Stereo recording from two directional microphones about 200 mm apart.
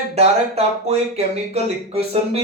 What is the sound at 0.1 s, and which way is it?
Speech, 30° right (ahead or behind).